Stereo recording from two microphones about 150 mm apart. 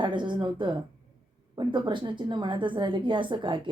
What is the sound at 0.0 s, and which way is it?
Speech, 30° right (ahead or behind).